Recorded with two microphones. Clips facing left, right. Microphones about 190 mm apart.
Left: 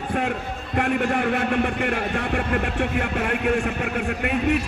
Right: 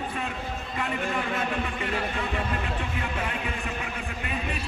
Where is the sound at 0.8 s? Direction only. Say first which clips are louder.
Left 8 dB; 65° left (ahead or behind).